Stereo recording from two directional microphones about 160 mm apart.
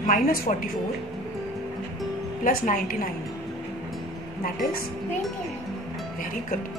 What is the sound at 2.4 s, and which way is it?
Speech, 60° left (ahead or behind).